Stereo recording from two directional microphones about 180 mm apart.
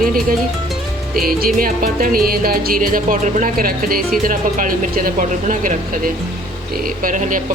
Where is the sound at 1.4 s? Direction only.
50° right (ahead or behind).